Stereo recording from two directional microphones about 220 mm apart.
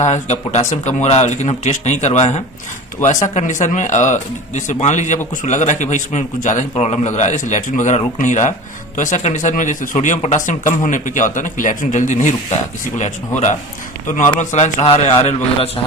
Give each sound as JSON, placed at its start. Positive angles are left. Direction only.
{"t": 0.0, "sound": "a man's voice", "side_deg": 30}